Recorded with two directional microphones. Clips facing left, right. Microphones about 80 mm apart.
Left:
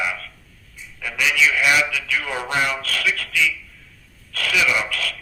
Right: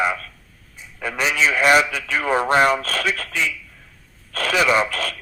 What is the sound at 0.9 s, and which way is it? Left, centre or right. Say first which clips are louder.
Speech: even; right.